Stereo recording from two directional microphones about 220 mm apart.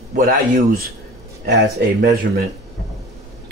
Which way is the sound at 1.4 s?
50° right (ahead or behind).